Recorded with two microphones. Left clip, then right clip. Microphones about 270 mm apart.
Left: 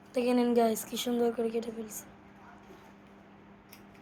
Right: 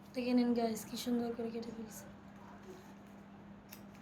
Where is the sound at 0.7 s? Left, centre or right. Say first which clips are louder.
Left 8 dB; centre.